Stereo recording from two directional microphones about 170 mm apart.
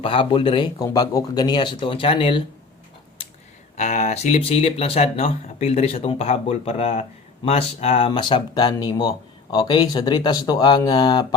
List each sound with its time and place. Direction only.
0.0 s speech: 30° left (ahead or behind)
3.8 s speech: 45° left (ahead or behind); by 11.3 s 25° left (ahead or behind)